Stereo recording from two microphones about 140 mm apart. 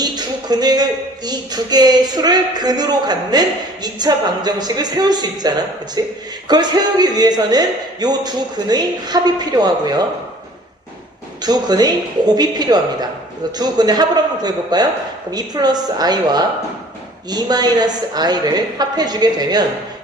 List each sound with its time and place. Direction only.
0.0 s a man's voice: 30° right (ahead or behind)
11.4 s a man's voice: 30° right (ahead or behind)